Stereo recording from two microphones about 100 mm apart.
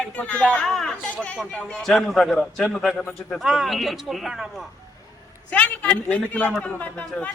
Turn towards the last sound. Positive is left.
turn(degrees=15)  # may be behind; listen again after turning